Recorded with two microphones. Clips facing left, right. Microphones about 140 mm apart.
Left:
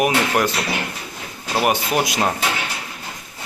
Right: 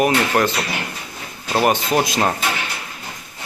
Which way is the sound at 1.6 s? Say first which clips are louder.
Right 2 dB; 10° left (ahead or behind).